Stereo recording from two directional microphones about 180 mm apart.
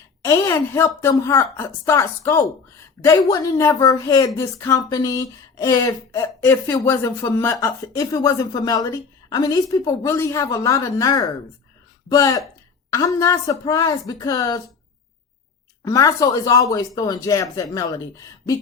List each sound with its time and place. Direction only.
0.2 s a woman's voice: 15° left (ahead or behind)
15.8 s speech: 20° left (ahead or behind)